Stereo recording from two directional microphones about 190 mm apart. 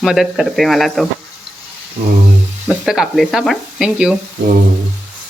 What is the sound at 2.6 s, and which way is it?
Speech, centre (ahead or behind).